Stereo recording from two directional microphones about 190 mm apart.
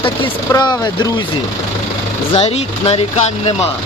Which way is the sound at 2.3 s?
30° left (ahead or behind).